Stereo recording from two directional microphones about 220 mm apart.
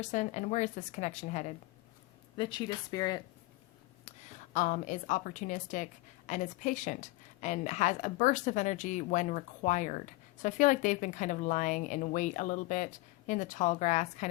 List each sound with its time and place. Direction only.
0.0 s a woman's voice: 30° left (ahead or behind)
2.4 s speech: 20° left (ahead or behind)
4.5 s a woman's voice: 35° left (ahead or behind)